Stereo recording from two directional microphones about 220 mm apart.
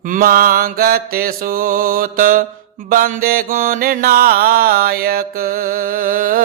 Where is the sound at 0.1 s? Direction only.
40° right (ahead or behind).